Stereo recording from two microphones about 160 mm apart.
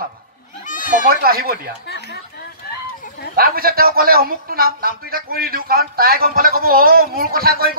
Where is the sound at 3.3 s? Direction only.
70° right (ahead or behind).